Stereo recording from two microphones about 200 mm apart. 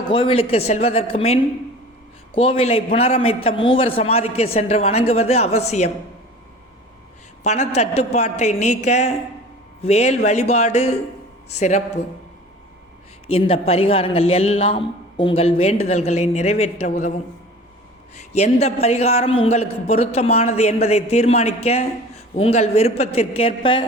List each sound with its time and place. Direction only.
0.0 s a man's voice: 25° left (ahead or behind)
7.4 s a man's voice: 35° left (ahead or behind)
13.2 s a man's voice: 30° left (ahead or behind)
18.2 s a man's voice: 35° left (ahead or behind)